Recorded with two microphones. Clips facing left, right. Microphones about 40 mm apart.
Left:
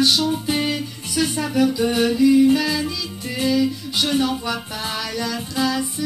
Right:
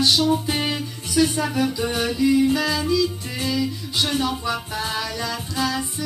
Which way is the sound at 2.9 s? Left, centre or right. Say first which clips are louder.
Right 3 dB; left.